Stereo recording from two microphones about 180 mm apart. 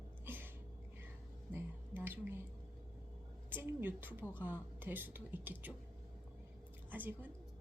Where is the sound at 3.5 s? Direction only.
10° right (ahead or behind).